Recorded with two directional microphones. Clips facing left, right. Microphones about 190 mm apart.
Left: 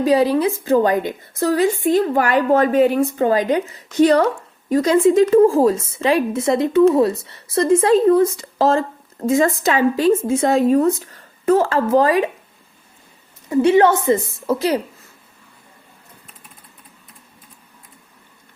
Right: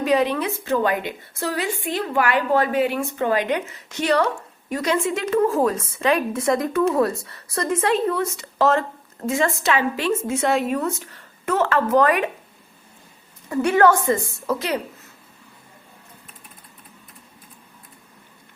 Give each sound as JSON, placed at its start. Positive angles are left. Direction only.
{"t": 0.0, "sound": "a woman's voice", "side_deg": 35}
{"t": 13.5, "sound": "a woman's voice", "side_deg": 20}